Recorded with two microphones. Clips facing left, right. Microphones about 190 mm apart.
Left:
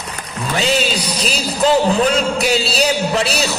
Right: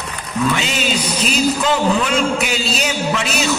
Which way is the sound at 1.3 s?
35° left (ahead or behind).